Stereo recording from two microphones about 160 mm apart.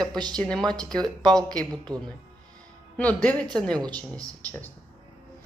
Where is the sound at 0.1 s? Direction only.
25° right (ahead or behind).